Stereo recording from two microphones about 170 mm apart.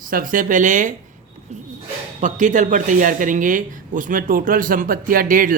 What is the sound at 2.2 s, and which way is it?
Speech, 45° right (ahead or behind).